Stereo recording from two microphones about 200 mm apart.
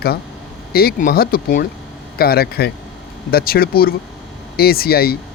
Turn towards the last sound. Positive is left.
turn(degrees=50)  # may be behind; listen again after turning